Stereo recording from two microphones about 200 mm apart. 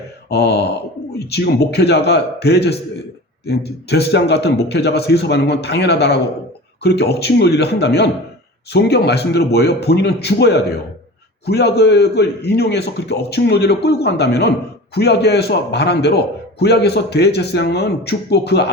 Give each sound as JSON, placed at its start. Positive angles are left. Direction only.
{"t": 0.3, "sound": "a man's voice", "side_deg": 55}